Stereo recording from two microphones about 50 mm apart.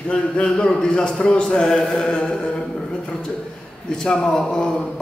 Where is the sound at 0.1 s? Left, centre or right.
Centre.